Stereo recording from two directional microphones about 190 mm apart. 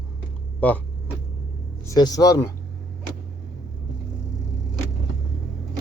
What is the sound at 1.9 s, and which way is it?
Speech, 20° left (ahead or behind).